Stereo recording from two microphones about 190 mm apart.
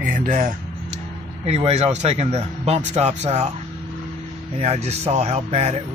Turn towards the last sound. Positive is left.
turn(degrees=-35)  # may be behind; listen again after turning